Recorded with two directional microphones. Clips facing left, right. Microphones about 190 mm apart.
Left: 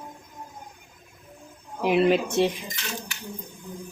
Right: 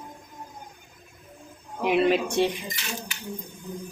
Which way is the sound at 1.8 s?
Centre (ahead or behind).